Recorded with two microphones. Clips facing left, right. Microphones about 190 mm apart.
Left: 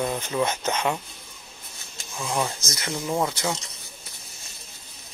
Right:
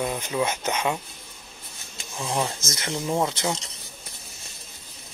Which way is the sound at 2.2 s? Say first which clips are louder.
Even; 25° right (ahead or behind).